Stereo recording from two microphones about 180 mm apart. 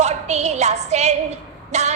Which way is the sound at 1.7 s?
40° right (ahead or behind).